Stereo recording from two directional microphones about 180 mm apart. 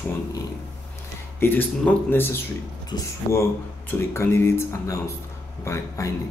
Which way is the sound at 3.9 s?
15° left (ahead or behind).